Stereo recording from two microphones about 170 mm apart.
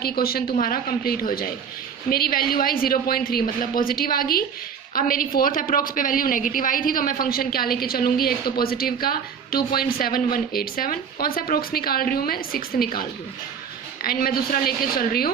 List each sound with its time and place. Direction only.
0.0 s a woman's voice: 60° left (ahead or behind)